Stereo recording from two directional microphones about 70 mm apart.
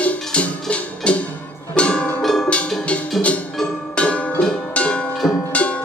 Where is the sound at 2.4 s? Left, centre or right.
Centre.